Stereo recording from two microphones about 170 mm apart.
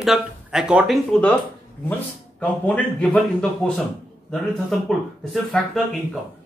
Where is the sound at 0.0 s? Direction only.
5° right (ahead or behind).